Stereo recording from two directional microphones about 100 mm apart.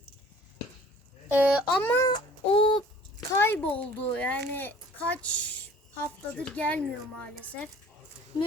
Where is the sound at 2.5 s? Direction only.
60° left (ahead or behind).